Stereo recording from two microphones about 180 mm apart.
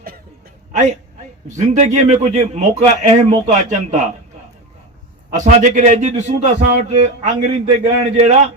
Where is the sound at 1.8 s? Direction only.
40° right (ahead or behind).